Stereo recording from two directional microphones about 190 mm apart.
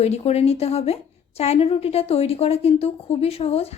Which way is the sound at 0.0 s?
35° left (ahead or behind).